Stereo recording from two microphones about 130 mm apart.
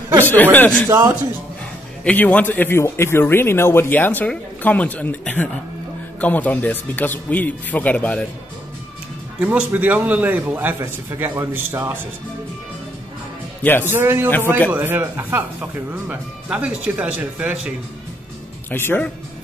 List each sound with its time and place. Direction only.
0.2 s speech: 15° left (ahead or behind)
0.8 s a man's voice: 20° right (ahead or behind)
2.0 s speech: 10° left (ahead or behind)
9.4 s speech: 10° right (ahead or behind)
13.6 s a man's voice: 15° left (ahead or behind)
13.8 s speech: 15° right (ahead or behind)
18.7 s speech: 15° left (ahead or behind)